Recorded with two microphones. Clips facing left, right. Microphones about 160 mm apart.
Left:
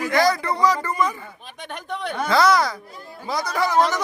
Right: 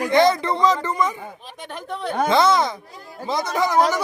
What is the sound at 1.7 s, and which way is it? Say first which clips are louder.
Speech: right 1 dB; centre (ahead or behind).